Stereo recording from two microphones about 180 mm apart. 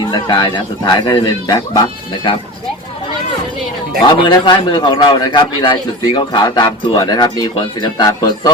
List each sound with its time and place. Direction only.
0.0 s a man's voice: 25° left (ahead or behind)
4.0 s a man's voice: 25° left (ahead or behind)